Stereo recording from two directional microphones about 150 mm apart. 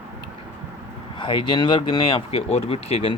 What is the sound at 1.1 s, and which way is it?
Speech, 30° left (ahead or behind).